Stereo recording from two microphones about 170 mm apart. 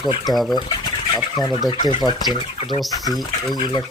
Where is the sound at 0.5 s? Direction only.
25° left (ahead or behind).